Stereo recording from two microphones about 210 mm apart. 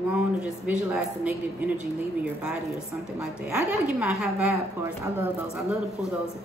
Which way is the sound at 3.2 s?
10° right (ahead or behind).